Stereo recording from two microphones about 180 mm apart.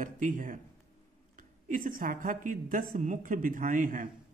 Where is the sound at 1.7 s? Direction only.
50° right (ahead or behind).